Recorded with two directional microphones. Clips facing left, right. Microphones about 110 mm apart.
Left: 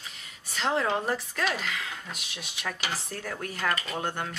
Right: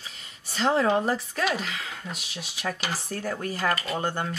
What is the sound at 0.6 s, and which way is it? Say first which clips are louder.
Speech: right 4 dB; 35° right (ahead or behind).